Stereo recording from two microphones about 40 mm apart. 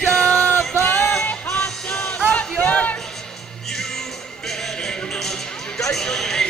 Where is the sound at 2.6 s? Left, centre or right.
Left.